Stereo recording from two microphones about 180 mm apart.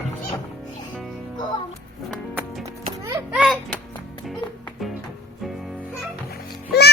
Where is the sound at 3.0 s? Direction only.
5° right (ahead or behind).